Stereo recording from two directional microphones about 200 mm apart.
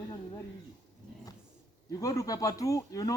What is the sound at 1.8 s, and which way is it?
Speech, 15° left (ahead or behind).